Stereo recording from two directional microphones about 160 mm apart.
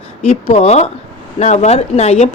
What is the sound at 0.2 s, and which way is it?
A woman's voice, 40° left (ahead or behind).